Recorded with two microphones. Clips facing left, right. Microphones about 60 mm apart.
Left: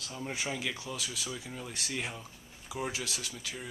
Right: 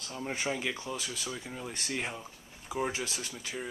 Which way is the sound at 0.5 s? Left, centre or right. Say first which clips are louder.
Right 4 dB; centre.